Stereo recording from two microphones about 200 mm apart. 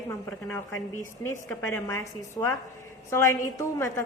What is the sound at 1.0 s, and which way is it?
A woman's voice, 15° left (ahead or behind).